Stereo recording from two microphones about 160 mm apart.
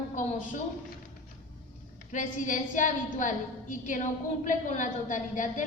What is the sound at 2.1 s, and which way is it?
A woman's voice, 55° left (ahead or behind).